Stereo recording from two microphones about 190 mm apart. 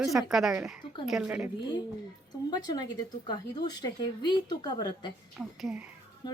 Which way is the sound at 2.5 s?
20° left (ahead or behind).